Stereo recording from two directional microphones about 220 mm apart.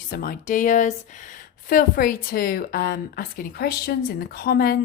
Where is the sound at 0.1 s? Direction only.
40° left (ahead or behind).